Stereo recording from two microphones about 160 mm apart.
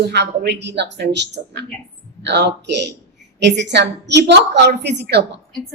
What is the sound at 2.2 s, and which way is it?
A woman's voice, 90° right.